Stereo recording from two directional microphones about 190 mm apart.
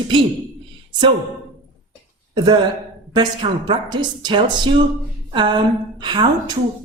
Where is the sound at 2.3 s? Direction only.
25° right (ahead or behind).